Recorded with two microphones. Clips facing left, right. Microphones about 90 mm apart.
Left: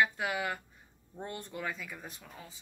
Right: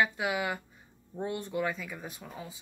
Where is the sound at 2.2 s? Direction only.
15° right (ahead or behind).